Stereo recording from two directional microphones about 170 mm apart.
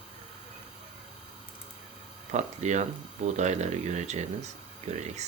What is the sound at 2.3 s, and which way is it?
Speech, 45° right (ahead or behind).